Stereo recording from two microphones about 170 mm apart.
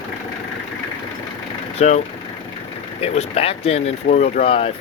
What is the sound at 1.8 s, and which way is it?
Speech, 40° left (ahead or behind).